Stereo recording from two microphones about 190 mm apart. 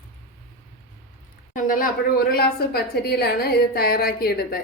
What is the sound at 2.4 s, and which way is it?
A woman's voice, 55° left (ahead or behind).